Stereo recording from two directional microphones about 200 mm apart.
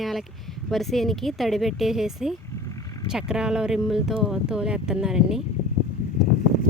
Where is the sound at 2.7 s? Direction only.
15° left (ahead or behind).